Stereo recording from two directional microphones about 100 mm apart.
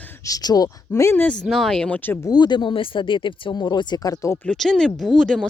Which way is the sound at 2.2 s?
45° left (ahead or behind).